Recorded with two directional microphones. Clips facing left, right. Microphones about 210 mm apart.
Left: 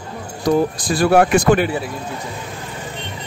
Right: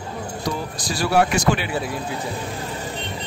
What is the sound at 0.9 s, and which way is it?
Speech, 55° left (ahead or behind).